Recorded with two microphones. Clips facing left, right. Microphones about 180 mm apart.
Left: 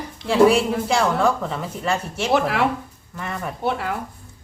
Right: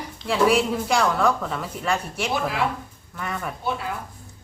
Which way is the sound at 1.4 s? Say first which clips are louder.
Left 2 dB; centre (ahead or behind).